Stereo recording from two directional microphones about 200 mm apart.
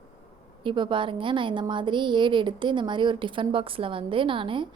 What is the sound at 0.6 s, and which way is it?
A woman's voice, 25° right (ahead or behind).